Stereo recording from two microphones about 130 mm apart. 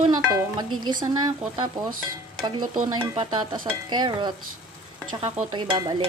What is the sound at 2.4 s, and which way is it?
Stir, 35° right (ahead or behind).